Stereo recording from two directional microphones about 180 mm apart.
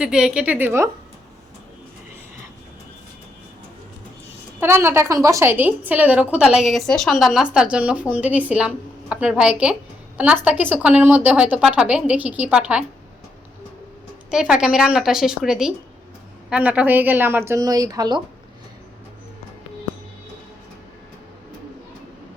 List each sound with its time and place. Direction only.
0.0 s a woman's voice: 5° right (ahead or behind)
4.6 s a woman's voice: 15° right (ahead or behind)
14.3 s a woman's voice: 5° right (ahead or behind); by 18.2 s 20° right (ahead or behind)